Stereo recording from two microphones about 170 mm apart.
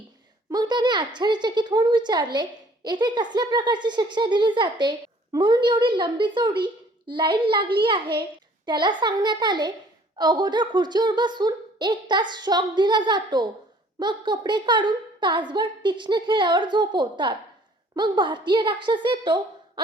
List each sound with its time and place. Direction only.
0.5 s a woman's voice: 25° right (ahead or behind)